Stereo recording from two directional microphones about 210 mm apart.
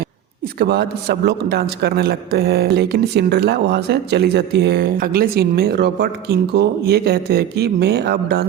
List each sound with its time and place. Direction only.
0.6 s a man's voice: 50° right (ahead or behind)